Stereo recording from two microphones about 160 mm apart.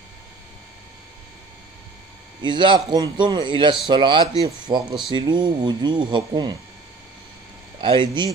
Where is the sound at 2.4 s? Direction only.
30° right (ahead or behind).